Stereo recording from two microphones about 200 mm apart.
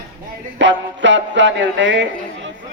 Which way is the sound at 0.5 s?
65° right (ahead or behind).